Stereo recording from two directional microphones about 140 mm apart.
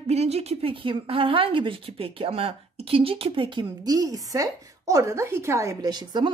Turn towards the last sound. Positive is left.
turn(degrees=-30)  # may be behind; listen again after turning